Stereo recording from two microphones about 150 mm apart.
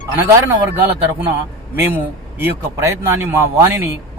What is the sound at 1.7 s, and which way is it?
Speech, 15° right (ahead or behind).